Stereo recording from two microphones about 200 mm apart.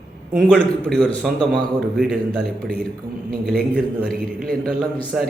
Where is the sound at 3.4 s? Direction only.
50° right (ahead or behind).